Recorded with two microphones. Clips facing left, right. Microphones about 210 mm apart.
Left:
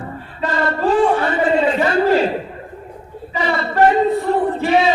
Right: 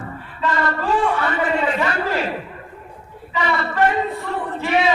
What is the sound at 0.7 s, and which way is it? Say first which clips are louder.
A man's voice: left 9 dB; 30° left (ahead or behind).